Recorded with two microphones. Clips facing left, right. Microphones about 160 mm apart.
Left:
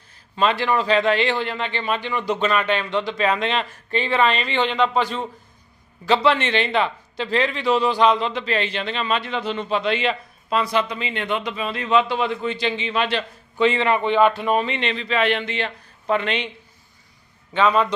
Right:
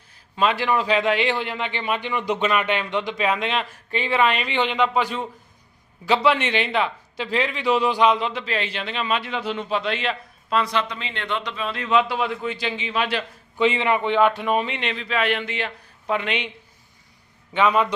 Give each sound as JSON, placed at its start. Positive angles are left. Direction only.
{"t": 0.1, "sound": "speech", "side_deg": -10}
{"t": 14.1, "sound": "speech", "side_deg": 20}
{"t": 14.4, "sound": "speech", "side_deg": -10}
{"t": 17.5, "sound": "speech", "side_deg": -15}